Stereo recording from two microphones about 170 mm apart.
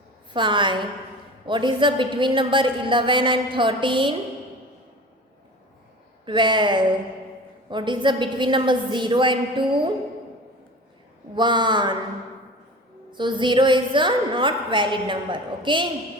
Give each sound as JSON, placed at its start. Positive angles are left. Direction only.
{"t": 0.3, "sound": "a woman's voice", "side_deg": -30}
{"t": 6.2, "sound": "a woman's voice", "side_deg": -30}
{"t": 11.3, "sound": "a woman's voice", "side_deg": -25}
{"t": 13.1, "sound": "a woman's voice", "side_deg": -25}